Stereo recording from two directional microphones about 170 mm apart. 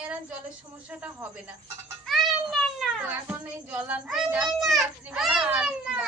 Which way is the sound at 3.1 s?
10° right (ahead or behind).